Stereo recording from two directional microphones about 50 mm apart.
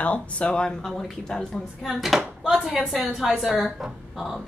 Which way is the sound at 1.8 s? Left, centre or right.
Centre.